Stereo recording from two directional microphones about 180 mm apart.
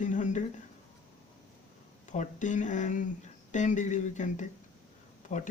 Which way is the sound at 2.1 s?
45° left (ahead or behind).